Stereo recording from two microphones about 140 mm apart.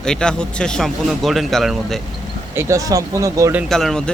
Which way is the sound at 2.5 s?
20° right (ahead or behind).